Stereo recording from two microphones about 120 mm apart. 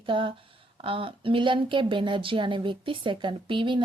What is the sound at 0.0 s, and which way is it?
Speech, 45° right (ahead or behind).